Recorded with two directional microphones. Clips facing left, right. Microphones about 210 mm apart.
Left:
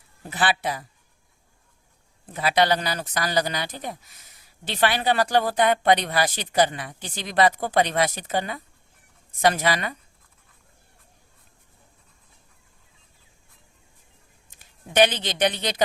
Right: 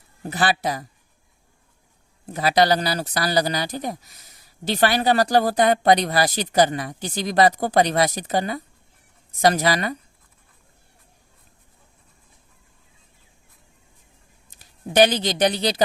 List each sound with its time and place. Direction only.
0.3 s speech: 40° right (ahead or behind)
2.3 s speech: 40° right (ahead or behind)
14.5 s speech: 40° right (ahead or behind)